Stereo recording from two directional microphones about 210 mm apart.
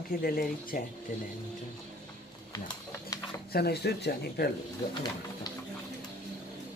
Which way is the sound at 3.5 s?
50° left (ahead or behind).